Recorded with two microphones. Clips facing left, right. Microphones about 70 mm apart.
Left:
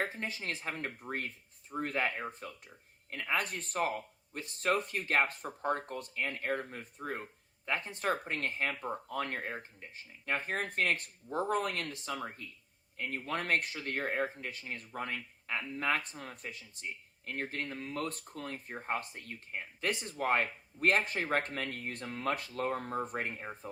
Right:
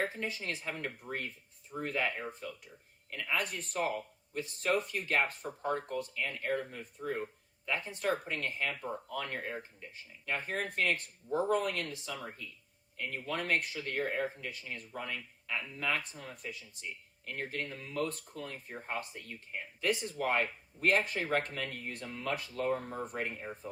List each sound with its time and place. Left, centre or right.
0.2 s speech: left